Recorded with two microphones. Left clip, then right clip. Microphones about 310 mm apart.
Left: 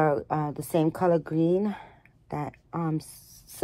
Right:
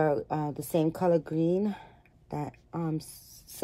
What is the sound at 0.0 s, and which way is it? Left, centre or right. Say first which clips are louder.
Speech: left 3 dB; left.